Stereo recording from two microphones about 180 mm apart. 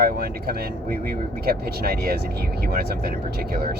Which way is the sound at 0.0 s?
60° right (ahead or behind).